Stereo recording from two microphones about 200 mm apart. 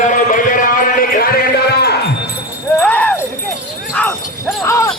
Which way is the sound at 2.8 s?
5° left (ahead or behind).